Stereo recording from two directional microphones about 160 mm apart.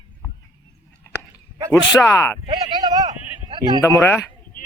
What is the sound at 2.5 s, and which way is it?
A man's voice, 25° right (ahead or behind).